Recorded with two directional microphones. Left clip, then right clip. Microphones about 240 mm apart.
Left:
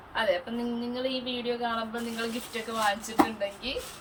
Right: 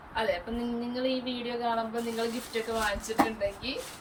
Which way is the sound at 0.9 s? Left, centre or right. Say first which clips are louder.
Right 1 dB; centre.